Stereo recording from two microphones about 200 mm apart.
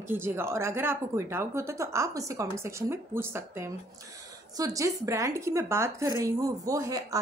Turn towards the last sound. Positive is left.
turn(degrees=-15)  # may be behind; listen again after turning